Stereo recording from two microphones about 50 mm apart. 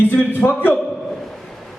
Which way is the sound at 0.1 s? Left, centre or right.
Left.